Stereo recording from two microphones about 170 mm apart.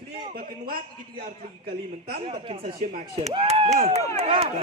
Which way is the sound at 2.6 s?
45° right (ahead or behind).